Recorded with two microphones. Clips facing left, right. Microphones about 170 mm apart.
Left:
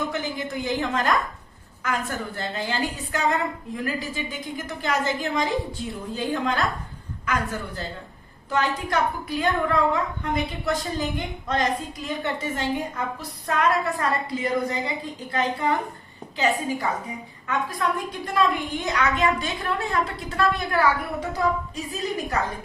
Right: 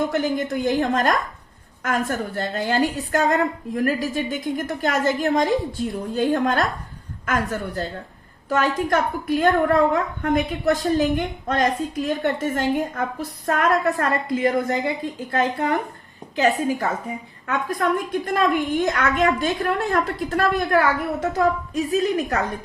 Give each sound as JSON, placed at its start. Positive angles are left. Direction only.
{"t": 0.1, "sound": "a woman's voice", "side_deg": -50}